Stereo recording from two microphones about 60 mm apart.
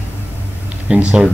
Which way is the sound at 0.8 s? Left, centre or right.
Centre.